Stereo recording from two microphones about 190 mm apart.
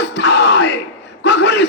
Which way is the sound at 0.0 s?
65° left (ahead or behind).